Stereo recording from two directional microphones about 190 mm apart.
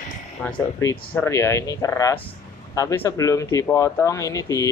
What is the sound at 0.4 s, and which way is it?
Speech, 10° left (ahead or behind).